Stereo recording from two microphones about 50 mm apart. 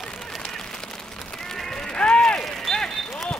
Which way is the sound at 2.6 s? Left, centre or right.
Centre.